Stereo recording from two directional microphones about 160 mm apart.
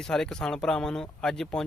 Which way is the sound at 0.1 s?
5° left (ahead or behind).